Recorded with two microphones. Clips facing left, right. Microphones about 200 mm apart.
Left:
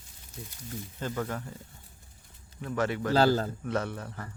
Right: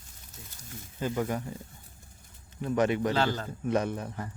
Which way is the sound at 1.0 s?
10° right (ahead or behind).